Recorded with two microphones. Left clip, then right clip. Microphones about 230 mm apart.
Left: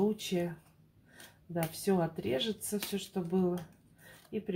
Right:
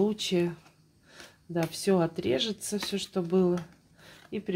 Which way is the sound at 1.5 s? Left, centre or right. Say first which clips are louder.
Right 5 dB; right.